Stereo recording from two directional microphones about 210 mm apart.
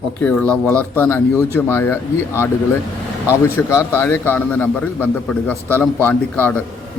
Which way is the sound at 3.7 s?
10° left (ahead or behind).